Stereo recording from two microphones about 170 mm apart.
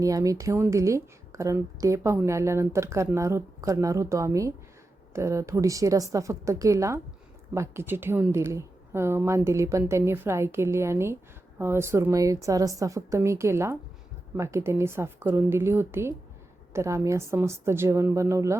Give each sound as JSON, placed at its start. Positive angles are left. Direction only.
{"t": 0.0, "sound": "a woman's voice", "side_deg": -20}